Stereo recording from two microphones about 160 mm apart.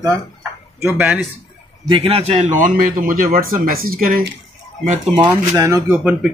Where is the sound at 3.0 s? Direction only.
60° right (ahead or behind).